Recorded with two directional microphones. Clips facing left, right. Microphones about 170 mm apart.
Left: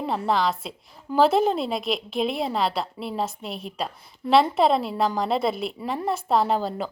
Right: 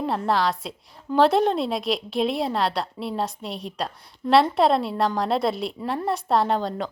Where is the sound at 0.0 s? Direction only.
Centre (ahead or behind).